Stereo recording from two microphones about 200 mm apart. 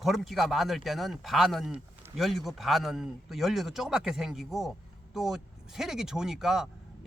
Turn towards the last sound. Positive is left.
turn(degrees=0)  # may be behind; listen again after turning